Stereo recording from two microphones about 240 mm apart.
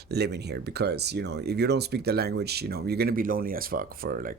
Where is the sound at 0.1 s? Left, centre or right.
Right.